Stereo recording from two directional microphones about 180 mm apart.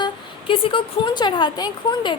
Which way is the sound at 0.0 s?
30° left (ahead or behind).